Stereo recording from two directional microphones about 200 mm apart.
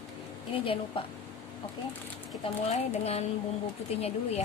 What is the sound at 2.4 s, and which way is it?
Speech, 30° left (ahead or behind).